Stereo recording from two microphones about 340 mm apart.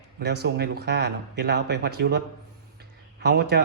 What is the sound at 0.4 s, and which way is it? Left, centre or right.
A man's voice, right.